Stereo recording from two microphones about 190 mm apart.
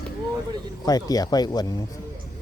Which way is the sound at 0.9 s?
20° left (ahead or behind).